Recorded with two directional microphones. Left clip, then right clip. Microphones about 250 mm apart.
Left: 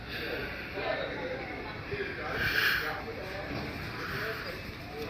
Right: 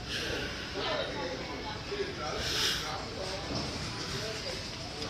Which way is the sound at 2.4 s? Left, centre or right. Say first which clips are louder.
Left 5 dB; centre.